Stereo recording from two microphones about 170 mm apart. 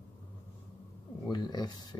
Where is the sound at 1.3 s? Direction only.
25° left (ahead or behind).